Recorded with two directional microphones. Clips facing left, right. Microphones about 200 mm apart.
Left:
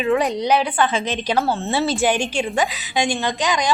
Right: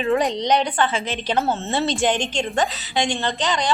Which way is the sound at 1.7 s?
5° left (ahead or behind).